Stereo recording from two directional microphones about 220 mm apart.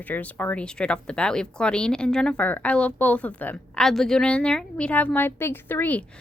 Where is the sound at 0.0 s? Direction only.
5° left (ahead or behind).